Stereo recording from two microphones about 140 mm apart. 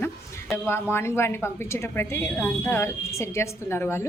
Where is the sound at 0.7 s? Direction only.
15° left (ahead or behind).